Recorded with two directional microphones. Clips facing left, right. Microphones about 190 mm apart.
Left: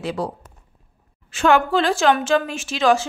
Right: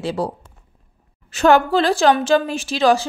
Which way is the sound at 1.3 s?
40° right (ahead or behind).